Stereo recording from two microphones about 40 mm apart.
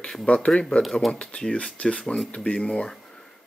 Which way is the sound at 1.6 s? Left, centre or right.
Left.